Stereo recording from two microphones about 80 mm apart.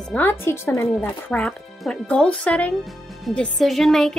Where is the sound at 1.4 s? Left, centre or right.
Centre.